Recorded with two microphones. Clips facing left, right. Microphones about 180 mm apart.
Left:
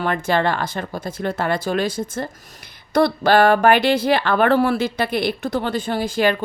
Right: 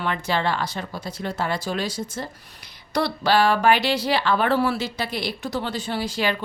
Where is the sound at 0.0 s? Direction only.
50° left (ahead or behind).